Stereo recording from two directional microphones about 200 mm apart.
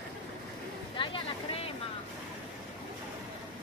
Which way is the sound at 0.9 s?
25° left (ahead or behind).